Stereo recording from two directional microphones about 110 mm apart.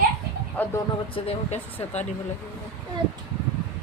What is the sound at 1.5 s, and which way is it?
Speech, 90° left.